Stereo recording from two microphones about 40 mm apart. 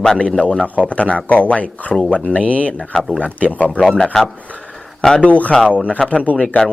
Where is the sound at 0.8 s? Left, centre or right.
Left.